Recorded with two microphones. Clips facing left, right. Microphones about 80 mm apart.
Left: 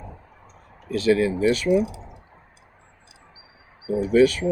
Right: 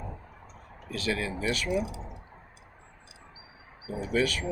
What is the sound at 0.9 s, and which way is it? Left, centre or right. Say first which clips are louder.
Speech: left 12 dB; left.